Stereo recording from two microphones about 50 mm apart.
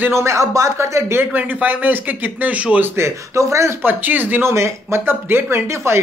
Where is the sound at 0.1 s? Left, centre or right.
Right.